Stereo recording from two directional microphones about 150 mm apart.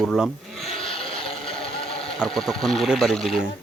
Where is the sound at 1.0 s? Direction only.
40° left (ahead or behind).